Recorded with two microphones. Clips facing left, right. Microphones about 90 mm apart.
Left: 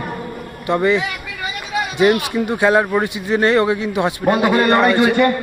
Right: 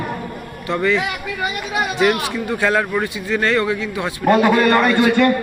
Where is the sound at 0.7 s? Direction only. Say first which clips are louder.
Left 2 dB; 20° left (ahead or behind).